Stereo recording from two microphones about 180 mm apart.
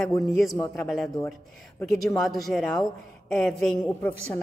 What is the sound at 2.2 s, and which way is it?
A woman's voice, centre (ahead or behind).